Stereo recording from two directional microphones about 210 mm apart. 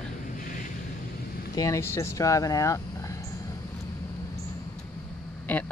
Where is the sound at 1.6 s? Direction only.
15° left (ahead or behind).